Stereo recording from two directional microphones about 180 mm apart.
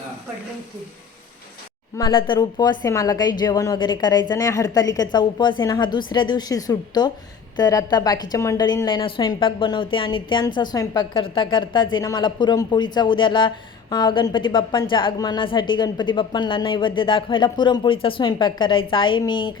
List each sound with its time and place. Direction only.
2.0 s a woman's voice: 25° left (ahead or behind)